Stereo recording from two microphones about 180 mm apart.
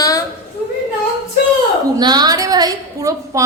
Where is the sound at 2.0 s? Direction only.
25° right (ahead or behind).